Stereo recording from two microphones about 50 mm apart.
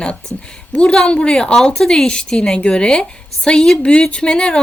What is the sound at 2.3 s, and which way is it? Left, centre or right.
Speech, centre.